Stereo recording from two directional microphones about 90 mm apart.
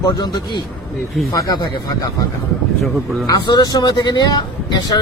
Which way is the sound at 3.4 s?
50° left (ahead or behind).